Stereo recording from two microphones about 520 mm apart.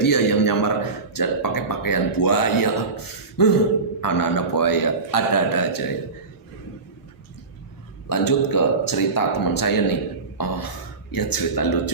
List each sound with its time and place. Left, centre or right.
0.0 s a man's voice: left
8.1 s a man's voice: left